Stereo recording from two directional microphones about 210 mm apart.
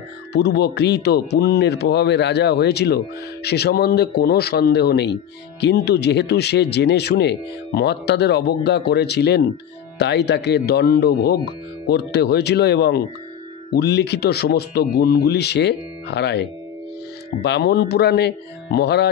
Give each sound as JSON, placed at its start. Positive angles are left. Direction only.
{"t": 0.3, "sound": "speech", "side_deg": 50}